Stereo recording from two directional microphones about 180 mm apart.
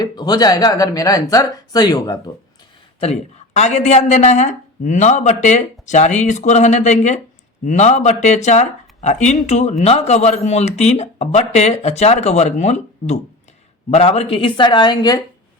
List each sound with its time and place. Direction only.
0.0 s speech: 20° left (ahead or behind)
3.0 s a woman's voice: 35° left (ahead or behind)